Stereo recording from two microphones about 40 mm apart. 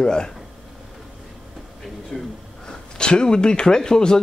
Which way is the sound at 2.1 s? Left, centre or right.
Left.